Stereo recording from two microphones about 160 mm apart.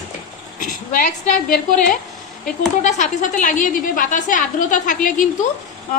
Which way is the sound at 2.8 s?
50° left (ahead or behind).